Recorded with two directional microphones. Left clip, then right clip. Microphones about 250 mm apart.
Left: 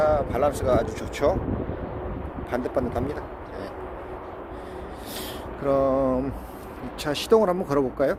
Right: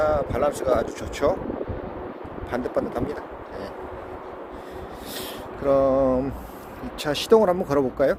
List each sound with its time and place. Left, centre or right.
0.0 s speech: centre
2.5 s speech: centre
5.6 s speech: centre